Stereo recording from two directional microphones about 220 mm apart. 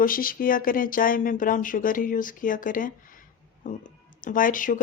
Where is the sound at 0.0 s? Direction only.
40° left (ahead or behind).